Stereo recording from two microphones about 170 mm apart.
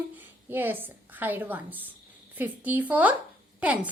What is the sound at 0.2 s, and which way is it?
A woman's voice, 10° right (ahead or behind).